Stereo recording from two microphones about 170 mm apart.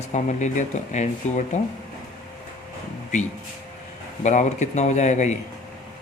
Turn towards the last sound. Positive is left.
turn(degrees=45)  # may be behind; listen again after turning